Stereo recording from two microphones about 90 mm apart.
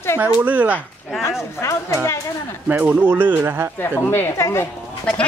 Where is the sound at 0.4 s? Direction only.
15° right (ahead or behind).